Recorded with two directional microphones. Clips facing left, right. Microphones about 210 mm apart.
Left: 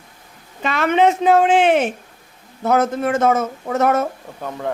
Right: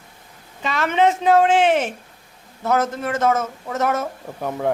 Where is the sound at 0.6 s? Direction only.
55° left (ahead or behind).